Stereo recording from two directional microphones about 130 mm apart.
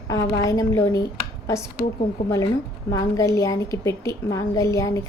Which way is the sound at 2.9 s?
25° left (ahead or behind).